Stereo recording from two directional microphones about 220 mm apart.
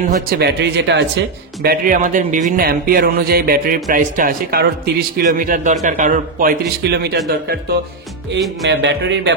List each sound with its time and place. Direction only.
0.3 s speech: 50° right (ahead or behind)
8.6 s speech: 50° right (ahead or behind)